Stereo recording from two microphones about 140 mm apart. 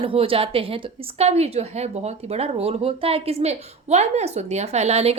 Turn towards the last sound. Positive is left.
turn(degrees=-50)  # may be behind; listen again after turning